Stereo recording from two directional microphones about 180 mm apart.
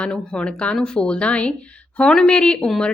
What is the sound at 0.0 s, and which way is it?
A woman's voice, 5° left (ahead or behind).